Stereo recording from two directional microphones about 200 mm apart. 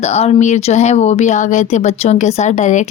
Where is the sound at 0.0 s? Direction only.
30° left (ahead or behind).